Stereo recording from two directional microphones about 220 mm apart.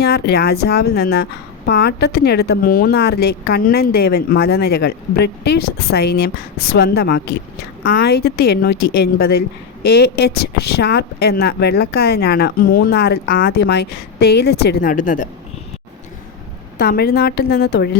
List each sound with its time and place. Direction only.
0.0 s a woman's voice: 45° left (ahead or behind)
16.7 s a woman's voice: 45° left (ahead or behind)